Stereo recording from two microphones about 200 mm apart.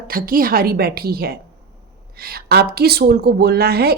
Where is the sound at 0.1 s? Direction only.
45° right (ahead or behind).